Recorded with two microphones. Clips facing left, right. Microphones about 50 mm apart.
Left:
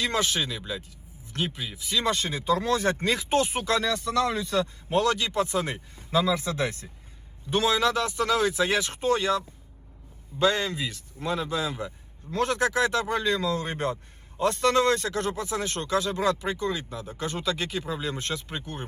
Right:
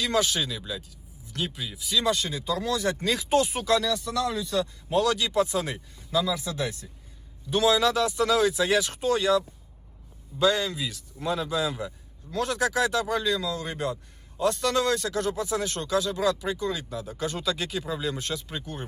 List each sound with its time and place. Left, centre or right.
0.0 s speech: left